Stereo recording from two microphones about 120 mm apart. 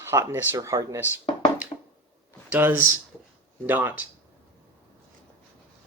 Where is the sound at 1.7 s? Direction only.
35° left (ahead or behind).